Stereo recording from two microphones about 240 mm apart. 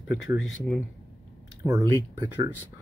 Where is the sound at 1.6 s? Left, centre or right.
Centre.